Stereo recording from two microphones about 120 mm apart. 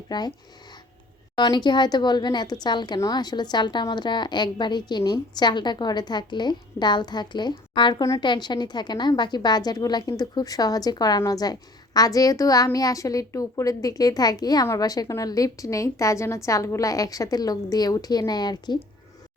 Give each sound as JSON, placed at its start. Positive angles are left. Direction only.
{"t": 0.1, "sound": "speech", "side_deg": 35}
{"t": 1.4, "sound": "a woman's voice", "side_deg": 40}